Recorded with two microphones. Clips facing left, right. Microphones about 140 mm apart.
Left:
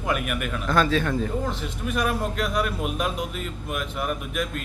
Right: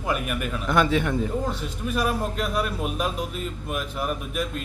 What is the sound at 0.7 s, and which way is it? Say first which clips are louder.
Speech: even; 20° right (ahead or behind).